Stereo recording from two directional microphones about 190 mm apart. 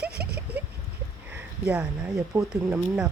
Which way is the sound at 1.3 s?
5° right (ahead or behind).